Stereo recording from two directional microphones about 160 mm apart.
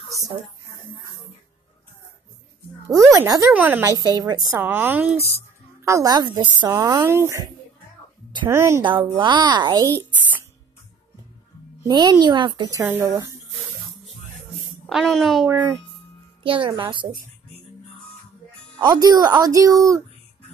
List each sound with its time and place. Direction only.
2.9 s a woman's voice: 20° right (ahead or behind)
8.5 s speech: 15° right (ahead or behind)
8.8 s a woman's voice: 30° right (ahead or behind)
11.8 s a woman's voice: 25° right (ahead or behind)
12.8 s speech: 15° right (ahead or behind)
14.9 s a woman's voice: centre (ahead or behind)
16.4 s a child's voice: 30° right (ahead or behind)
18.8 s a woman's voice: 25° right (ahead or behind)